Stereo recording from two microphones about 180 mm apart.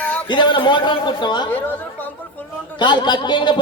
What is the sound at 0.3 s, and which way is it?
A man's voice, 25° left (ahead or behind).